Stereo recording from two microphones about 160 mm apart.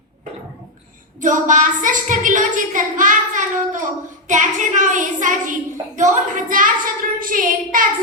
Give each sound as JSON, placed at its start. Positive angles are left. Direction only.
{"t": 1.2, "sound": "a woman's voice", "side_deg": -55}